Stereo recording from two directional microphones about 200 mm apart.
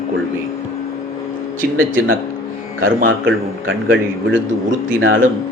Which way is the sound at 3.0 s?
75° right (ahead or behind).